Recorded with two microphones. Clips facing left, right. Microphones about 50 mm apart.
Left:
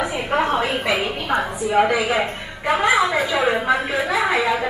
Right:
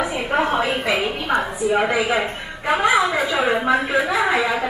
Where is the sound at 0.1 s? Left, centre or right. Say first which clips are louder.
Even; centre.